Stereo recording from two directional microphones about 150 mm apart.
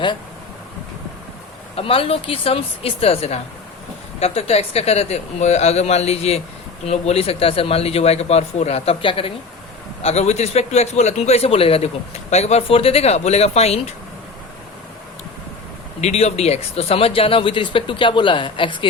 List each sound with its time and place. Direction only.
1.7 s a man's voice: 40° left (ahead or behind)
16.0 s speech: 45° left (ahead or behind)